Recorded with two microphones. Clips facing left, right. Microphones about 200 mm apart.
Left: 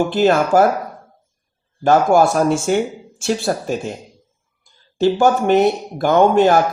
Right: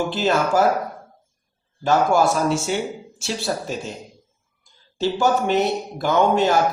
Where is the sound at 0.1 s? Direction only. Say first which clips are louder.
Left 6 dB; 50° left (ahead or behind).